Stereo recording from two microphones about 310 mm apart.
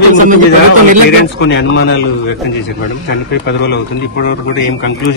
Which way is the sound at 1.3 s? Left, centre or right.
Left.